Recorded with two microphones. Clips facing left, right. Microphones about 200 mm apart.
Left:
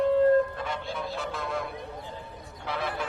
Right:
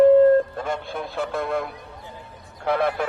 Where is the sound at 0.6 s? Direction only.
50° right (ahead or behind).